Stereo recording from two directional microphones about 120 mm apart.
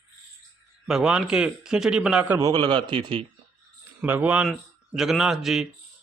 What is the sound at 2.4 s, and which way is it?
Speech, 35° right (ahead or behind).